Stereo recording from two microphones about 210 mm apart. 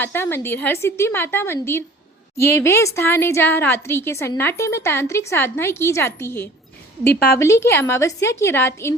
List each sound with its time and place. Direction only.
0.0 s a woman's voice: 10° left (ahead or behind)